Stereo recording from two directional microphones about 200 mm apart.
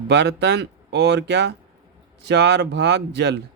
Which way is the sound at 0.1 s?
55° right (ahead or behind).